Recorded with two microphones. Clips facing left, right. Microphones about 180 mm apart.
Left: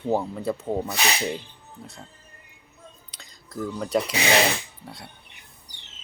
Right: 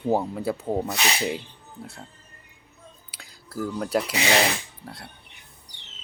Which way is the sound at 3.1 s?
10° right (ahead or behind).